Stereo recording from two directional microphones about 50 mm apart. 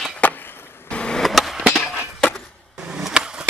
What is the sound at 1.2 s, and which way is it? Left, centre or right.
Skateboard, centre.